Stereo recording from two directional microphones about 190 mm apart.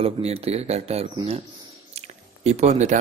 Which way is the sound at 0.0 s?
30° right (ahead or behind).